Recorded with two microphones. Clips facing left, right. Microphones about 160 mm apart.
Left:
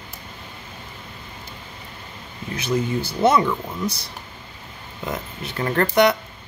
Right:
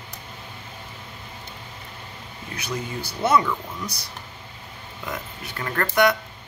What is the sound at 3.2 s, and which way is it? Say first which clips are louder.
Speech: left 3 dB; 25° left (ahead or behind).